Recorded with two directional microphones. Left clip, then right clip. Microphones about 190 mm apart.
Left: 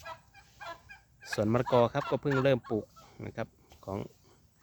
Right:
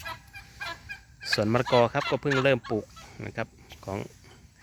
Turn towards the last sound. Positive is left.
turn(degrees=-5)  # may be behind; listen again after turning